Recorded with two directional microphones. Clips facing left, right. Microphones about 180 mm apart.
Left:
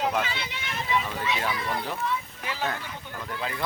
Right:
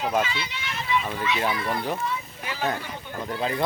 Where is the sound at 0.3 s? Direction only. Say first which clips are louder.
Right 2 dB; 50° left (ahead or behind).